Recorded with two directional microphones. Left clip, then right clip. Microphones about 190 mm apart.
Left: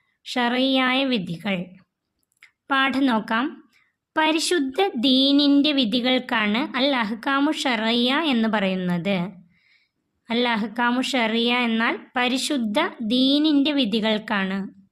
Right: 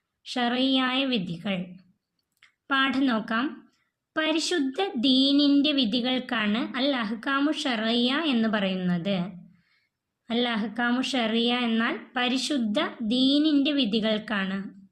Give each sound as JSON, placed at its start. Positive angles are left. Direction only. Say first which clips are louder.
{"t": 0.2, "sound": "speech", "louder": "left 4 dB", "side_deg": 35}